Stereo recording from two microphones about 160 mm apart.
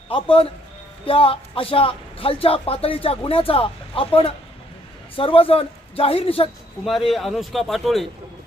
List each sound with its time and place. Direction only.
0.1 s speech: 35° left (ahead or behind)
6.8 s a man's voice: centre (ahead or behind)